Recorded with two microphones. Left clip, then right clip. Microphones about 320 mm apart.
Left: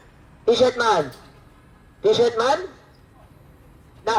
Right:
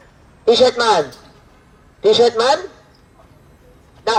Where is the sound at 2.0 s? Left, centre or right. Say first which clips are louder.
Right 5 dB; right.